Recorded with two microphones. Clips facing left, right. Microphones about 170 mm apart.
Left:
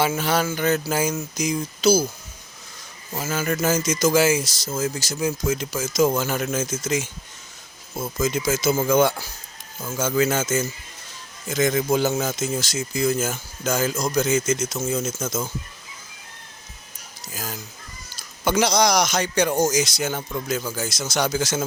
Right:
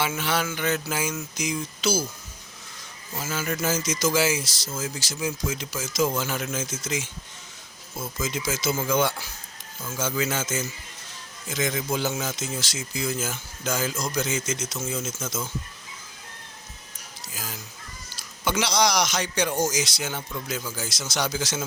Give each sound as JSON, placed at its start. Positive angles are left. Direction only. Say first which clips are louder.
{"t": 0.0, "sound": "speech", "louder": "left 5 dB", "side_deg": 40}
{"t": 3.2, "sound": "speech", "louder": "left 5 dB", "side_deg": 45}
{"t": 17.3, "sound": "speech", "louder": "left 5 dB", "side_deg": 45}